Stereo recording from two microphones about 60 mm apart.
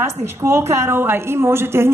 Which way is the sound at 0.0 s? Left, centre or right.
Right.